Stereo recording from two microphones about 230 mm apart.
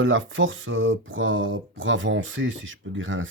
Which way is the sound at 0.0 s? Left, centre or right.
Right.